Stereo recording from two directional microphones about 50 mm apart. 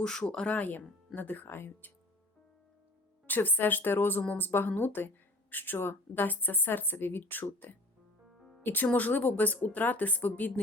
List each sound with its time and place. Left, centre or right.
0.0 s speech: centre
0.5 s speech: left
3.2 s speech: left
8.6 s speech: left